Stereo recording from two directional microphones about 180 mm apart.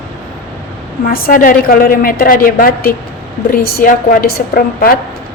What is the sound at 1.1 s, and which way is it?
A woman's voice, 50° left (ahead or behind).